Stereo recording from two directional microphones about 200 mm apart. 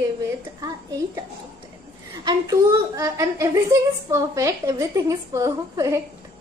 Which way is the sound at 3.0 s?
15° right (ahead or behind).